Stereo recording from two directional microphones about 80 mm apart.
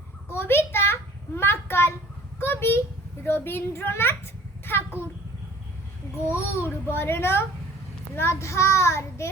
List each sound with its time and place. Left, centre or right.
0.3 s a sound: left
3.2 s a child's voice: left
6.3 s a child's voice: left